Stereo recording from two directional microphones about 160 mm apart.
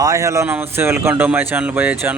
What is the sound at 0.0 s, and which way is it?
Speech, 20° right (ahead or behind).